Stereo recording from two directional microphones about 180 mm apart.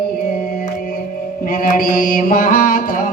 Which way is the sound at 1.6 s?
50° left (ahead or behind).